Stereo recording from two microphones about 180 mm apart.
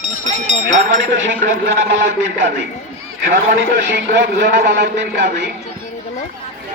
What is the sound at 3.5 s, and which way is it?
A man's voice, 70° right (ahead or behind).